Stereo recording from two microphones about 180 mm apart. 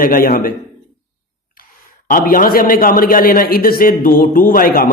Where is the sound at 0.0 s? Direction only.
55° left (ahead or behind).